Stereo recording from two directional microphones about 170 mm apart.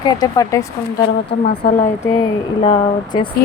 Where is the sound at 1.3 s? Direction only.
80° left.